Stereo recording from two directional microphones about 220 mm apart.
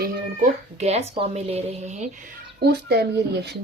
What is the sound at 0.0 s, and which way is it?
A child's voice, 30° right (ahead or behind).